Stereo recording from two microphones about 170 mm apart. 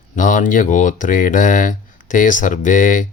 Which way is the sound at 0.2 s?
50° left (ahead or behind).